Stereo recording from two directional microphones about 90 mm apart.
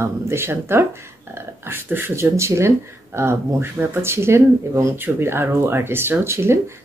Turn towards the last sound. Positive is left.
turn(degrees=-30)  # may be behind; listen again after turning